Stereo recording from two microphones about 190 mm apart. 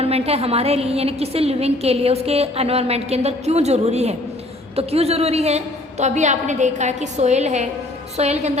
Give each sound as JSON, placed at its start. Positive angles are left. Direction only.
{"t": 0.0, "sound": "a woman's voice", "side_deg": -30}